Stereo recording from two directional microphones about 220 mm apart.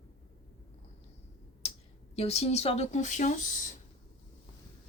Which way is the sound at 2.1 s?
30° left (ahead or behind).